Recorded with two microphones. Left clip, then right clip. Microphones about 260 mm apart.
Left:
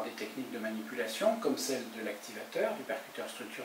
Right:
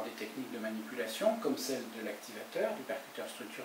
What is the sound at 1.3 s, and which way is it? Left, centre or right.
Speech, centre.